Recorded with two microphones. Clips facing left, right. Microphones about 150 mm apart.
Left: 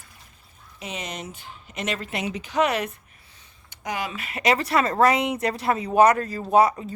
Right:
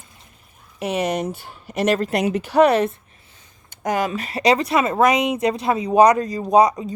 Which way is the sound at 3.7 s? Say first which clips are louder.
Right 8 dB; 45° right (ahead or behind).